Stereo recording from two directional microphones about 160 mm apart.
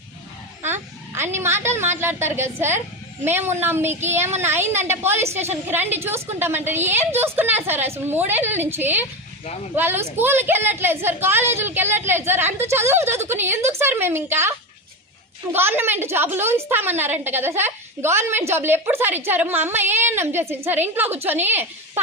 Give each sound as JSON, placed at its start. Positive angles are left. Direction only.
{"t": 0.6, "sound": "a sound", "side_deg": -15}
{"t": 2.0, "sound": "a woman's voice", "side_deg": -15}
{"t": 15.5, "sound": "a woman's voice", "side_deg": -15}